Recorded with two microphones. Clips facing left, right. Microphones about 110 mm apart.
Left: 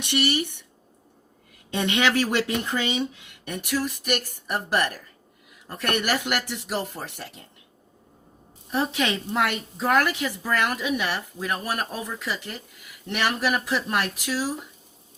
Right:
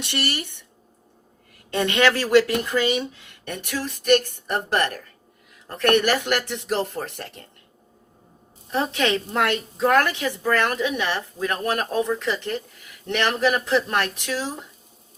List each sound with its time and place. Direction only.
0.0 s a woman's voice: 15° left (ahead or behind)
2.0 s a woman's voice: 15° left (ahead or behind)
8.7 s a woman's voice: 10° left (ahead or behind)